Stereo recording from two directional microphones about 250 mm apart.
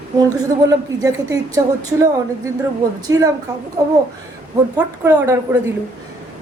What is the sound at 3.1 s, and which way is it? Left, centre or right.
Speech, right.